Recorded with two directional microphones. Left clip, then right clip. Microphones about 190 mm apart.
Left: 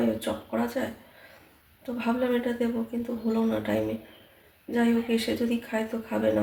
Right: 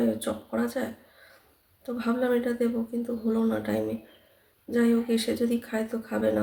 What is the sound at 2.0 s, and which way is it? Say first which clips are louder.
Speech: right 1 dB; 15° right (ahead or behind).